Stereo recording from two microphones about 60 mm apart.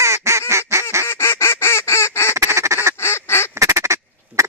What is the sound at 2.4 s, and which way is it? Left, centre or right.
Goose, right.